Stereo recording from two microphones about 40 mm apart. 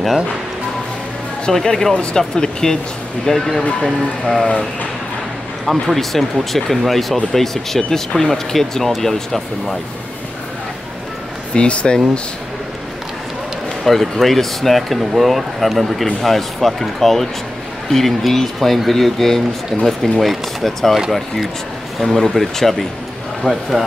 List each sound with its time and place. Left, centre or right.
1.5 s speech: centre
3.3 s speech: centre
5.7 s speech: centre
11.5 s speech: left
13.8 s speech: centre
22.0 s speech: centre